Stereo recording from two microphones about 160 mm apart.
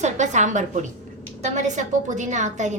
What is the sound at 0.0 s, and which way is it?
A woman's voice, 50° right (ahead or behind).